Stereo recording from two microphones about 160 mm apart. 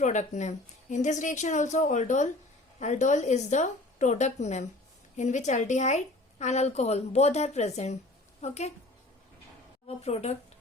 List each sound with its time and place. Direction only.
0.0 s a woman's voice: 50° left (ahead or behind)
9.8 s a woman's voice: 40° left (ahead or behind)